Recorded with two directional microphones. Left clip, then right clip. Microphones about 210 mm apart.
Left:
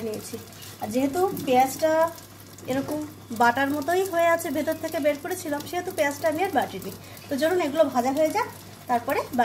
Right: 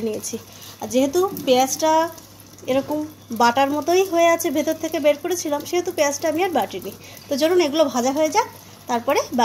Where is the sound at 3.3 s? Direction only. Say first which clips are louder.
Right 4 dB; 25° right (ahead or behind).